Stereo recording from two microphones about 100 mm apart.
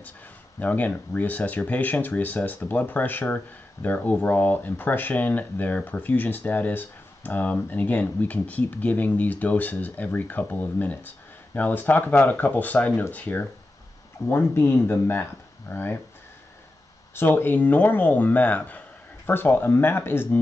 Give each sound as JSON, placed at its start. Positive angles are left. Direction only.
{"t": 0.6, "sound": "speech", "side_deg": 15}
{"t": 17.1, "sound": "speech", "side_deg": 20}